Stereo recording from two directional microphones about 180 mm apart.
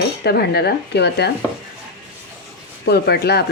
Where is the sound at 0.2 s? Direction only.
65° left (ahead or behind).